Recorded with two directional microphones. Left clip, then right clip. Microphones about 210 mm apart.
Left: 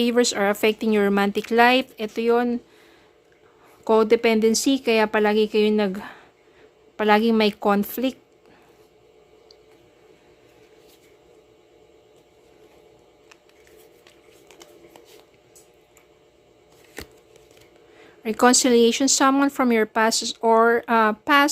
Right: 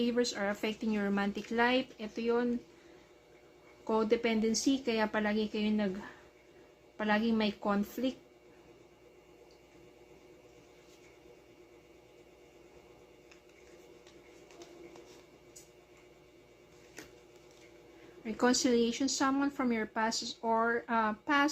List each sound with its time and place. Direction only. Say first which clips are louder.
0.0 s speech: left 12 dB; 45° left (ahead or behind)
3.8 s speech: left 13 dB; 55° left (ahead or behind)
18.2 s speech: left 13 dB; 50° left (ahead or behind)